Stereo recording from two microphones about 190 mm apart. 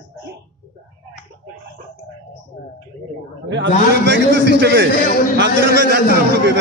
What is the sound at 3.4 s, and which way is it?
A man's voice, 70° right (ahead or behind).